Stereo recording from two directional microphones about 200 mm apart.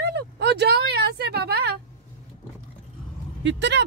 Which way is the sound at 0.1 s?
55° right (ahead or behind).